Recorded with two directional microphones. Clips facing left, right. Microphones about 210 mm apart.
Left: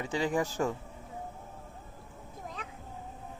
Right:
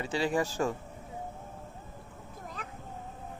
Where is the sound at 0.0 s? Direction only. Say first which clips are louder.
Right 1 dB; 15° left (ahead or behind).